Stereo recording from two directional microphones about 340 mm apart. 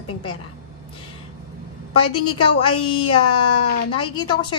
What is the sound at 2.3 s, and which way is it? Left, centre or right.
Speech, left.